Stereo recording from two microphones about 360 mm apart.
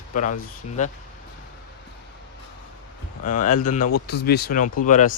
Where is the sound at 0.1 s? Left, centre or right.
Left.